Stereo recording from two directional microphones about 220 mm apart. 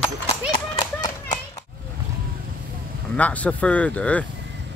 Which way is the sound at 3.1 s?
5° left (ahead or behind).